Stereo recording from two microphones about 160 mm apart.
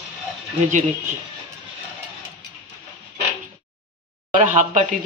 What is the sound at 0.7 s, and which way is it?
Speech, 50° right (ahead or behind).